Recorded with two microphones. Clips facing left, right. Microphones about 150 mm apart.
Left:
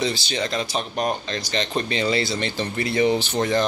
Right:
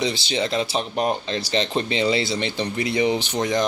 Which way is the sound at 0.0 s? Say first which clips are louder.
Right 1 dB; 25° right (ahead or behind).